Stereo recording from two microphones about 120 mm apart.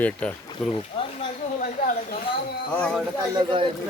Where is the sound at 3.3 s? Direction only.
40° right (ahead or behind).